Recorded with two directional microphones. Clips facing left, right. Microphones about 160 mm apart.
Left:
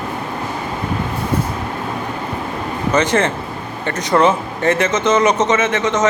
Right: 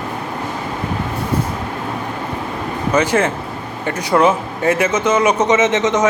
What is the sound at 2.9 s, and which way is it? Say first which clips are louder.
Speech: even; 10° right (ahead or behind).